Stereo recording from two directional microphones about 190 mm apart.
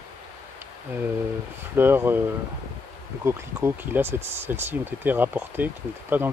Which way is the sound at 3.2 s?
10° right (ahead or behind).